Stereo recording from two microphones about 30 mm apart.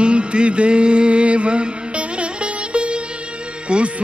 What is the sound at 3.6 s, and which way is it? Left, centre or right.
Speech, right.